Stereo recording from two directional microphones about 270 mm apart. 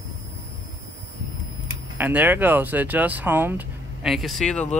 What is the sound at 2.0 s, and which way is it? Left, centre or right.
Speech, centre.